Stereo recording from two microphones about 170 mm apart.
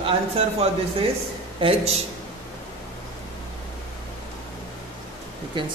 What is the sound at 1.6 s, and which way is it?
Speech, 35° right (ahead or behind).